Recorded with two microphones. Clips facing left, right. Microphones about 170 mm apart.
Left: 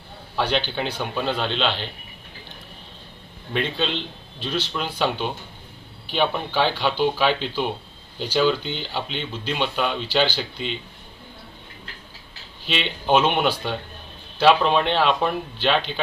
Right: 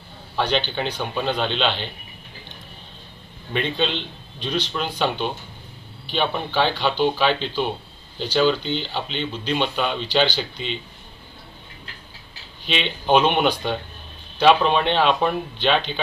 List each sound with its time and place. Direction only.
0.3 s speech: 5° left (ahead or behind)
3.5 s speech: centre (ahead or behind)
12.6 s speech: centre (ahead or behind)